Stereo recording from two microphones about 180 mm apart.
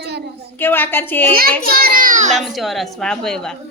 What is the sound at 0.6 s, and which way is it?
Speech, 10° left (ahead or behind).